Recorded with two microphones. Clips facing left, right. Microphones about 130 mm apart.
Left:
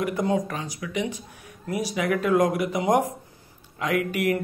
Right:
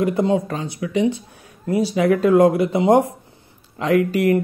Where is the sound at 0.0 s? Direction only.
30° right (ahead or behind).